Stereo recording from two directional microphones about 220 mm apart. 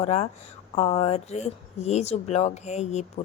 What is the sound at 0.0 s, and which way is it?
A woman's voice, 30° left (ahead or behind).